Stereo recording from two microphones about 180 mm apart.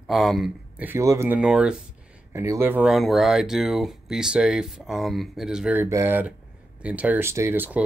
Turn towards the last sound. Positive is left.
turn(degrees=-10)  # may be behind; listen again after turning